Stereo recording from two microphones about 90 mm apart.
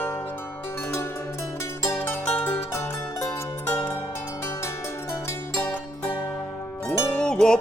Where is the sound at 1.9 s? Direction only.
20° left (ahead or behind).